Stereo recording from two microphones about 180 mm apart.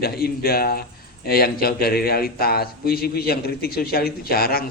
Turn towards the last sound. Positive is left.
turn(degrees=55)  # may be behind; listen again after turning